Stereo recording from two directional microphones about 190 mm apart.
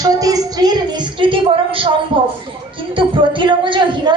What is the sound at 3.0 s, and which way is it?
Speech, 25° right (ahead or behind).